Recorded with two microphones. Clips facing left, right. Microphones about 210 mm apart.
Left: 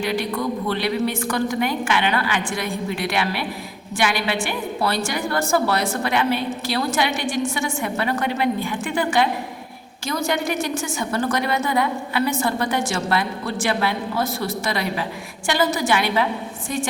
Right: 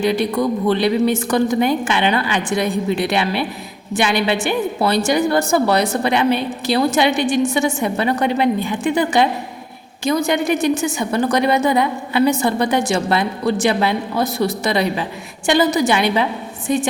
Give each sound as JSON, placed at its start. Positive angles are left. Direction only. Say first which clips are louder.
{"t": 0.0, "sound": "a woman's voice", "louder": "right 6 dB", "side_deg": -25}